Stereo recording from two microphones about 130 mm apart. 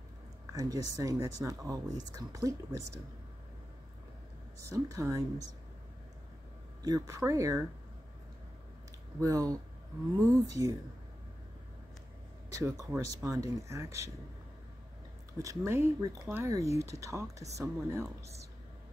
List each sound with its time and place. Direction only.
0.5 s speech: 25° right (ahead or behind)
4.6 s speech: 25° right (ahead or behind)
6.8 s speech: 25° right (ahead or behind)
9.2 s speech: 25° right (ahead or behind)
12.4 s speech: 25° right (ahead or behind)
15.3 s speech: 25° right (ahead or behind)